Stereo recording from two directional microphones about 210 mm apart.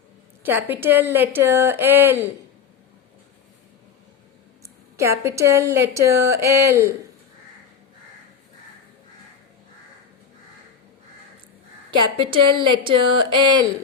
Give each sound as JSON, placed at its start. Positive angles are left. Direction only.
{"t": 0.4, "sound": "a woman's voice", "side_deg": -10}
{"t": 4.9, "sound": "a woman's voice", "side_deg": -15}
{"t": 12.0, "sound": "a woman's voice", "side_deg": -25}